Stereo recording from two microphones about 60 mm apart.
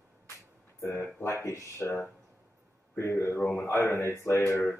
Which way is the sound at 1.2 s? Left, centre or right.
Left.